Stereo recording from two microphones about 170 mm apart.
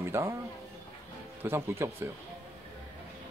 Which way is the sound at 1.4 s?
15° right (ahead or behind).